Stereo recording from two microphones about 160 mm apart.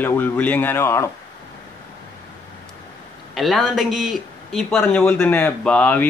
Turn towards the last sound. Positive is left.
turn(degrees=10)  # may be behind; listen again after turning